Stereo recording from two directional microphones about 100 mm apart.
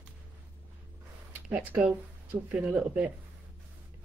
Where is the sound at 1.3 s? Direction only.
15° right (ahead or behind).